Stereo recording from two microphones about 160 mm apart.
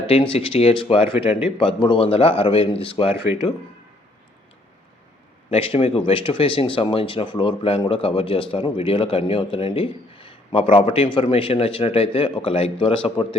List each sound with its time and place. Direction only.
0.1 s a man's voice: 35° left (ahead or behind)
5.5 s a man's voice: 40° left (ahead or behind)